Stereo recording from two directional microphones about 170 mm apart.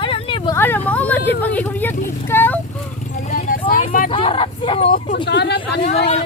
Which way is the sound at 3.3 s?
50° left (ahead or behind).